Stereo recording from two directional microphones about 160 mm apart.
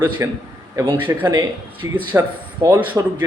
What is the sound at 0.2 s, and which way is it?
A man's voice, 15° right (ahead or behind).